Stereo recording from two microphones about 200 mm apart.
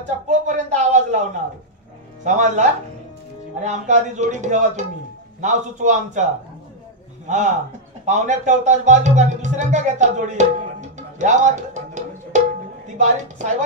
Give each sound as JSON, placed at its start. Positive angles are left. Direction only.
{"t": 0.3, "sound": "speech", "side_deg": -35}
{"t": 2.2, "sound": "speech", "side_deg": -35}
{"t": 3.6, "sound": "speech", "side_deg": -35}
{"t": 7.2, "sound": "a woman's voice", "side_deg": -35}